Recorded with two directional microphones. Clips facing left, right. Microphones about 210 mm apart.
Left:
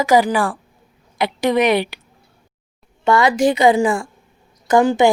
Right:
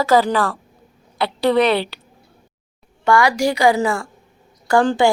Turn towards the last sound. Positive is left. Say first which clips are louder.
# left 2 dB
turn(degrees=15)  # may be behind; listen again after turning